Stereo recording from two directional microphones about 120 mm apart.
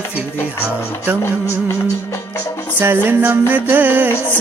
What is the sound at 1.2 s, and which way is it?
Music, 25° left (ahead or behind).